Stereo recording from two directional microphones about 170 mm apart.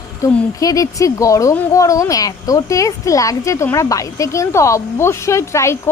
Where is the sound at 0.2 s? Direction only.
20° left (ahead or behind).